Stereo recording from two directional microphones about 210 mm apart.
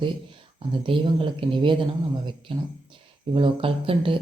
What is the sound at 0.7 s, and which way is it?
Speech, 25° right (ahead or behind).